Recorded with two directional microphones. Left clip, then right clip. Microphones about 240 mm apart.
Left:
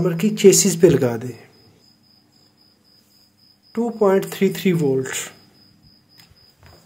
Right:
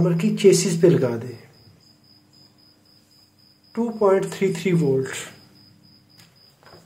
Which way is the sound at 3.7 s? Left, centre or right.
Left.